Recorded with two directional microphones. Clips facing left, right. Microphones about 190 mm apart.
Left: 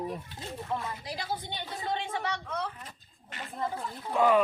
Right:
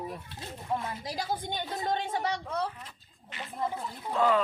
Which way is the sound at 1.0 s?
45° right (ahead or behind).